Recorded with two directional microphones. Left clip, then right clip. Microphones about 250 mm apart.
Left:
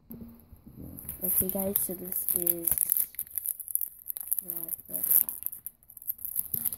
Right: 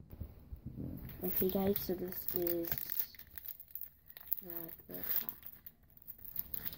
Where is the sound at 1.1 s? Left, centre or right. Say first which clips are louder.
Even; left.